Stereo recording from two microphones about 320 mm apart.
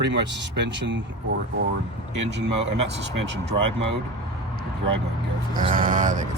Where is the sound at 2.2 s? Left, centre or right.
Right.